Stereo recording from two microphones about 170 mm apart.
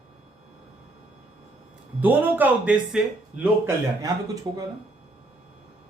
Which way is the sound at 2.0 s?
10° right (ahead or behind).